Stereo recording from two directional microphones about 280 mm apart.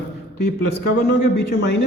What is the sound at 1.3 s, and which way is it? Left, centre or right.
Speech, left.